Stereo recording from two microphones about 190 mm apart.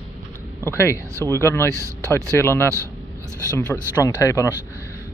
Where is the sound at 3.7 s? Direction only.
Centre (ahead or behind).